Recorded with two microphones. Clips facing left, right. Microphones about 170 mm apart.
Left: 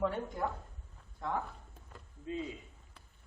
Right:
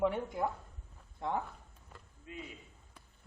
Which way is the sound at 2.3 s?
30° left (ahead or behind).